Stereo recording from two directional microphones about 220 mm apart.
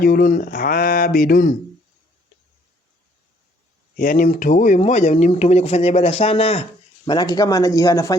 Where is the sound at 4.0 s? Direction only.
35° left (ahead or behind).